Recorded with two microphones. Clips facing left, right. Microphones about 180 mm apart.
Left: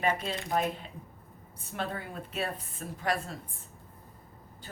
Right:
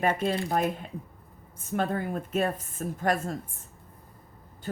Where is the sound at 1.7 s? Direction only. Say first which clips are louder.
Right 8 dB; 50° right (ahead or behind).